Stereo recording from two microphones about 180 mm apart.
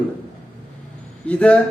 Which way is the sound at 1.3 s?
10° left (ahead or behind).